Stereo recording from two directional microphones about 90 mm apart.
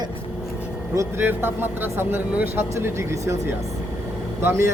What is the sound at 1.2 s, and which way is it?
Speech, 25° right (ahead or behind).